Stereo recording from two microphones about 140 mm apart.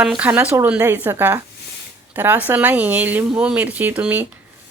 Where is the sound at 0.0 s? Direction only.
5° right (ahead or behind).